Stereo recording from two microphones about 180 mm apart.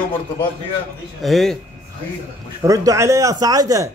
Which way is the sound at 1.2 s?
Centre (ahead or behind).